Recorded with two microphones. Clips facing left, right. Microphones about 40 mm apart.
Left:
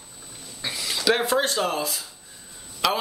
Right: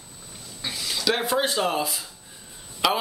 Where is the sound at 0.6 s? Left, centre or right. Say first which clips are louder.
Left 2 dB; centre.